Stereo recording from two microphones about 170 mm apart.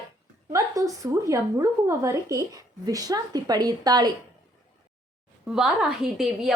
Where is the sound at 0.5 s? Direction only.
20° right (ahead or behind).